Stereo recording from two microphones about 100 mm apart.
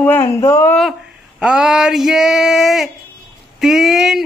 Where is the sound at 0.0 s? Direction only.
20° left (ahead or behind).